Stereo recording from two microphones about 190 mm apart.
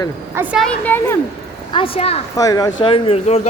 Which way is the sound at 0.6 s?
10° left (ahead or behind).